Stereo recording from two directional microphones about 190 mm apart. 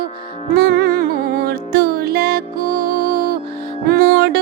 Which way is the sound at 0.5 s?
60° right (ahead or behind).